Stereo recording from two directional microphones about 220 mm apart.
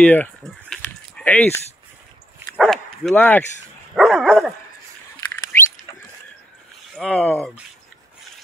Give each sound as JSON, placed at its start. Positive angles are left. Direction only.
{"t": 0.0, "sound": "a sound", "side_deg": 5}
{"t": 2.5, "sound": "speech", "side_deg": 5}
{"t": 3.9, "sound": "dog", "side_deg": 0}
{"t": 7.0, "sound": "speech", "side_deg": 5}